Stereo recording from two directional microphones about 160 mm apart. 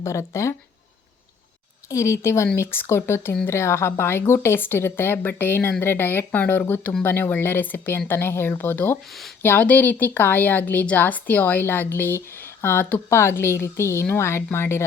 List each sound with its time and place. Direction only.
0.0 s a woman's voice: 15° left (ahead or behind)
1.9 s a woman's voice: 20° left (ahead or behind)
9.0 s speech: centre (ahead or behind)
9.4 s a woman's voice: 10° left (ahead or behind)